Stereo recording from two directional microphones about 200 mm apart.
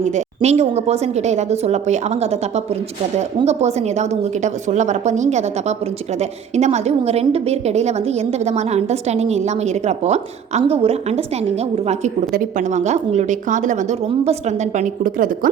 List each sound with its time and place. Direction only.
0.0 s a woman's voice: 35° right (ahead or behind)
12.3 s a woman's voice: 35° right (ahead or behind)
14.8 s a woman's voice: 40° right (ahead or behind)